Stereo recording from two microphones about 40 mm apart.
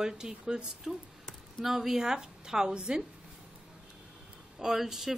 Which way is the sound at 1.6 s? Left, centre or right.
Centre.